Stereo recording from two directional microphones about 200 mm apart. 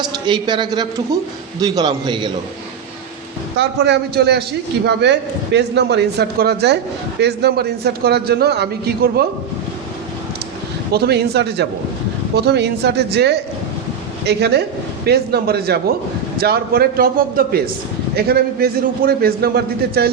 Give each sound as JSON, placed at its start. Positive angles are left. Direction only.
{"t": 0.0, "sound": "a man's voice", "side_deg": -25}
{"t": 3.6, "sound": "a man's voice", "side_deg": -55}
{"t": 10.9, "sound": "a man's voice", "side_deg": -55}